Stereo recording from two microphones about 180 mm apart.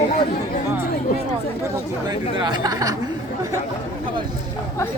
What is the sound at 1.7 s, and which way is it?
Speech, 20° right (ahead or behind).